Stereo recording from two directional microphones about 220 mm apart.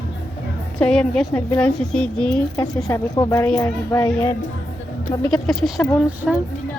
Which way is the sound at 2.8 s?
15° left (ahead or behind).